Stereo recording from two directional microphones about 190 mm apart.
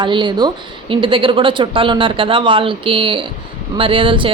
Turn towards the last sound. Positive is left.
turn(degrees=-25)  # may be behind; listen again after turning